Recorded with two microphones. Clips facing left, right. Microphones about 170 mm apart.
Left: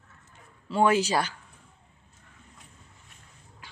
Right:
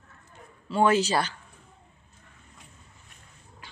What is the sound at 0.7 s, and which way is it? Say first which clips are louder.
Speech: right 1 dB; 10° left (ahead or behind).